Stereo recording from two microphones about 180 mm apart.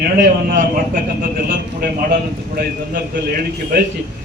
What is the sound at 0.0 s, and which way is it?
Speech, 45° right (ahead or behind).